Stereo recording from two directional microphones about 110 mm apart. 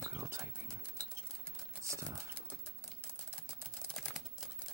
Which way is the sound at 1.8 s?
30° right (ahead or behind).